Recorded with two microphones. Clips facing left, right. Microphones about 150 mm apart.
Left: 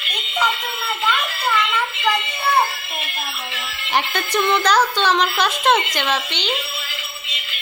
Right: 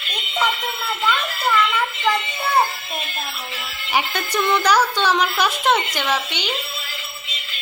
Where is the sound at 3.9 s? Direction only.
10° right (ahead or behind).